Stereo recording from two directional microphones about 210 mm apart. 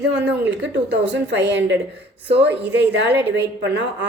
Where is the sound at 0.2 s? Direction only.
55° right (ahead or behind).